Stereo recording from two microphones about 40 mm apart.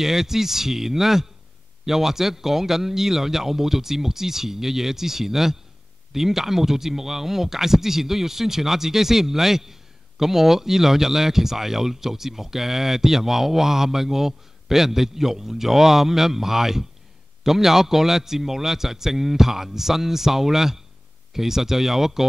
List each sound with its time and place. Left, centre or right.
0.0 s speech: centre